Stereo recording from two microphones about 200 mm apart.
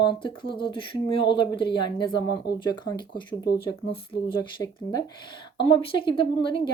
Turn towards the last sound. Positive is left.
turn(degrees=25)  # may be behind; listen again after turning